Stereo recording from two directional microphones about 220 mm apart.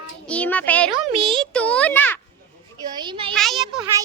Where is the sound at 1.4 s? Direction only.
5° left (ahead or behind).